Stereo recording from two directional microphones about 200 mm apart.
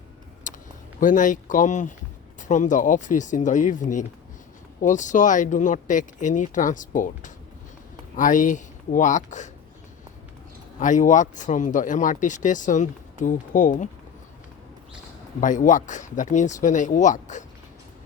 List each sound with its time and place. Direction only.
0.5 s a sound: 40° left (ahead or behind)
0.9 s speech: 40° left (ahead or behind)
10.8 s speech: 40° left (ahead or behind)
15.4 s speech: 40° left (ahead or behind)